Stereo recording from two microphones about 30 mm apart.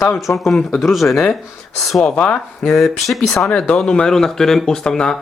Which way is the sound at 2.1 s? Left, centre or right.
Left.